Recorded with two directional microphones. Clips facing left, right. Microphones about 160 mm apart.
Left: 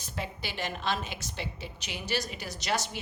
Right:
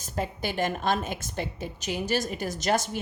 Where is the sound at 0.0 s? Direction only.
45° right (ahead or behind).